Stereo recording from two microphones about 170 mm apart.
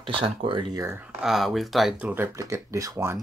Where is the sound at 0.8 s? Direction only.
15° right (ahead or behind).